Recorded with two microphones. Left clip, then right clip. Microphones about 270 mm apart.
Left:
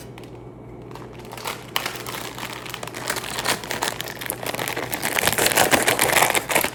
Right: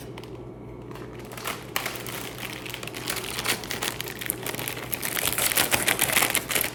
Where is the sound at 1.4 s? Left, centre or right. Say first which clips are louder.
Left 4 dB; centre.